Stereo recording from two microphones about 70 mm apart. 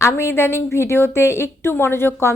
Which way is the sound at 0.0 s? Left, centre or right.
Left.